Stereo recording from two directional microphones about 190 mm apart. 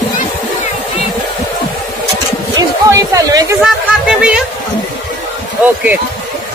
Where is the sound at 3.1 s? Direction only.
20° right (ahead or behind).